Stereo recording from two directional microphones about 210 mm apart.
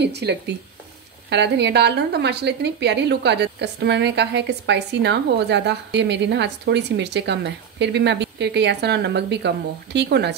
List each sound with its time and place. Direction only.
0.0 s a woman's voice: 55° right (ahead or behind)